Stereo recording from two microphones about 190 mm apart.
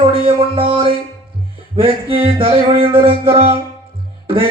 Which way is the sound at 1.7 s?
30° right (ahead or behind).